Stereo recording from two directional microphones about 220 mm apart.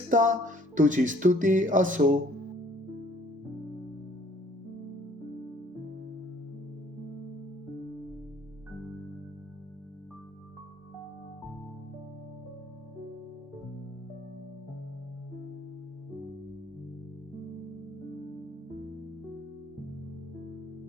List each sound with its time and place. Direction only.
0.1 s music: 35° right (ahead or behind)